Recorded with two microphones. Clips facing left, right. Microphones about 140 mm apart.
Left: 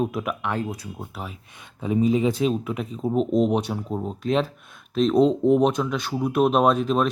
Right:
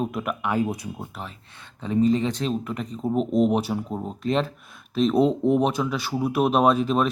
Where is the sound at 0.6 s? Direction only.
20° right (ahead or behind).